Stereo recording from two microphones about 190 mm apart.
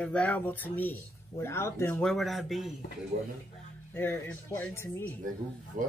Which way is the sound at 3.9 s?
10° left (ahead or behind).